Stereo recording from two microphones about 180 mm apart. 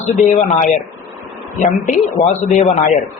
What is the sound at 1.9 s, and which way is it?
Speech, 45° left (ahead or behind).